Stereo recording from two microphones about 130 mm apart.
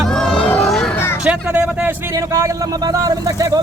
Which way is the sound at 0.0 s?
5° left (ahead or behind).